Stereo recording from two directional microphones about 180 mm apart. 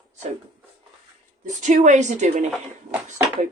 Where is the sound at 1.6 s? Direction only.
40° right (ahead or behind).